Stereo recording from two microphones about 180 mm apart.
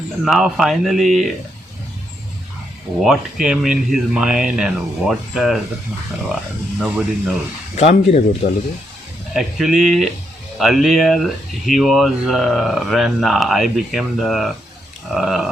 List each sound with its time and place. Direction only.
0.3 s speech: centre (ahead or behind)
3.0 s speech: 5° right (ahead or behind)
6.7 s speech: centre (ahead or behind)
7.8 s speech: 40° left (ahead or behind)
9.3 s speech: centre (ahead or behind)